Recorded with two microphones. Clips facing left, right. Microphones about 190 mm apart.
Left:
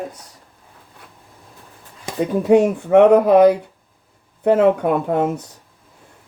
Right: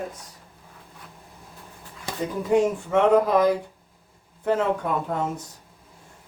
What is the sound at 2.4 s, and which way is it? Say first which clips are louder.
Speech: left 6 dB; 65° left (ahead or behind).